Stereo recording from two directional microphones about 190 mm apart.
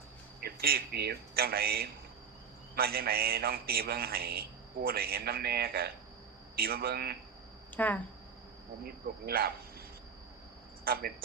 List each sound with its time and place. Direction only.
0.3 s a man's voice: 55° right (ahead or behind)
7.8 s speech: 10° left (ahead or behind)
8.8 s a man's voice: 55° right (ahead or behind)
10.8 s speech: 55° right (ahead or behind)